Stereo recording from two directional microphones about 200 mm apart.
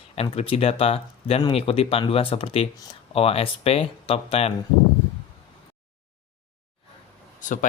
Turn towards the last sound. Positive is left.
turn(degrees=40)  # may be behind; listen again after turning